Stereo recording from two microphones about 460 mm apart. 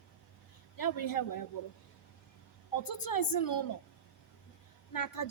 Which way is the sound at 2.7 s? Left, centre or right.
Left.